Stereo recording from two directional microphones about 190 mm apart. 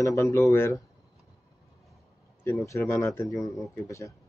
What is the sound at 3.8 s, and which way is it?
Speech, 15° left (ahead or behind).